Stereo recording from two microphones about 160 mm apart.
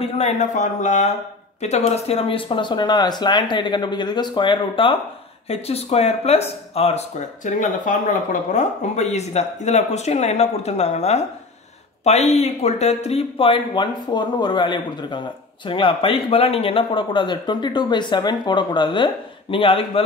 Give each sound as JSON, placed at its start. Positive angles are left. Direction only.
{"t": 0.0, "sound": "speech", "side_deg": 40}